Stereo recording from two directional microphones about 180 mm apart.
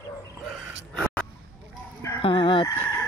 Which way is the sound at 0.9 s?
5° left (ahead or behind).